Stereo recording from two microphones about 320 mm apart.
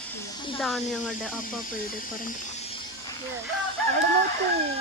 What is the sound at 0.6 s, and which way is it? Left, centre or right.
Speech, centre.